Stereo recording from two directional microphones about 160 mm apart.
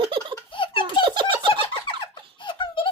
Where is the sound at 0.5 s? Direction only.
30° left (ahead or behind).